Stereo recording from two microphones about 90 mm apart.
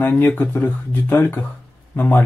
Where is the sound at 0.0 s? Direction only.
20° left (ahead or behind).